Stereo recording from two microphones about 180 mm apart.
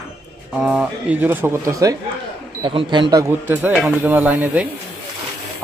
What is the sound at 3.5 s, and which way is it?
Speech, 5° right (ahead or behind).